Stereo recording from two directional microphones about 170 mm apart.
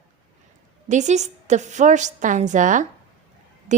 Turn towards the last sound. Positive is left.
turn(degrees=-45)  # may be behind; listen again after turning